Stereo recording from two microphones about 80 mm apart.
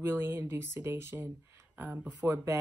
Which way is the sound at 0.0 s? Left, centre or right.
Right.